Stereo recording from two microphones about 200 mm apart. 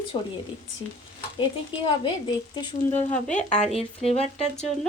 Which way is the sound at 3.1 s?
5° left (ahead or behind).